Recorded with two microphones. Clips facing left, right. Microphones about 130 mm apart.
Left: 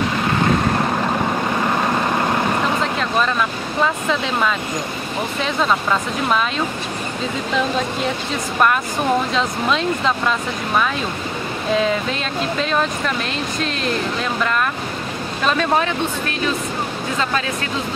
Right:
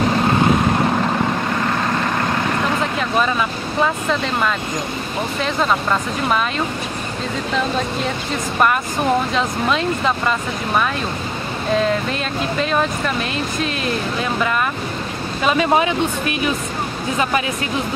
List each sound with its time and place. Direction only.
3.0 s speech: 5° right (ahead or behind)
9.3 s speech: centre (ahead or behind)
11.7 s speech: centre (ahead or behind)